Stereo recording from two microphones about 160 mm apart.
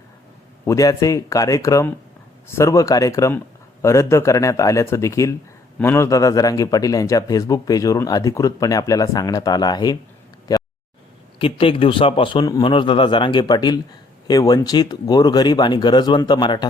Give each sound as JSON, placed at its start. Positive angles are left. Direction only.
{"t": 0.6, "sound": "speech", "side_deg": 20}
{"t": 10.5, "sound": "a sound", "side_deg": 20}
{"t": 11.3, "sound": "a man's voice", "side_deg": 35}